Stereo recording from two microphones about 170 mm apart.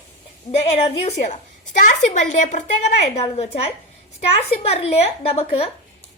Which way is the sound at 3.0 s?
35° left (ahead or behind).